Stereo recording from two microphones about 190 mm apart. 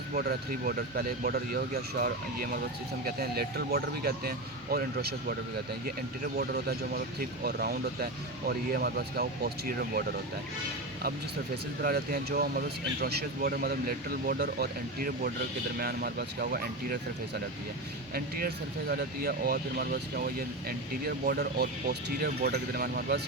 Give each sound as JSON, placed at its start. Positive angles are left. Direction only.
{"t": 0.1, "sound": "speech", "side_deg": -50}
{"t": 11.8, "sound": "speech", "side_deg": -50}